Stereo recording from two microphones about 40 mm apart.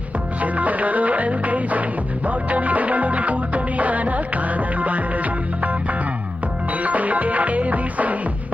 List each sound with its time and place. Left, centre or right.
0.4 s music: right